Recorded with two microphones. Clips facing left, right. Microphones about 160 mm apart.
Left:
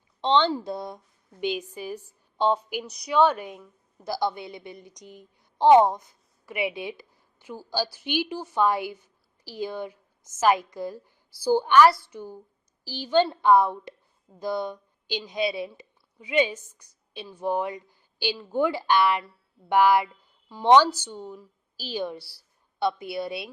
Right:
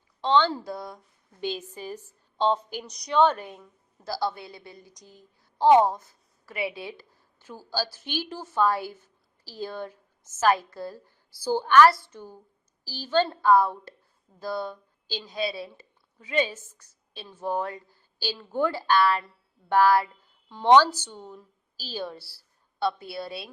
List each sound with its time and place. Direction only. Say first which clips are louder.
0.2 s a woman's voice: left 1 dB; 20° left (ahead or behind)